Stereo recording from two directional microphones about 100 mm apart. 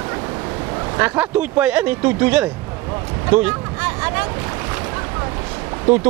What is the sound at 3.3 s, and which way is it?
Boat, 15° right (ahead or behind).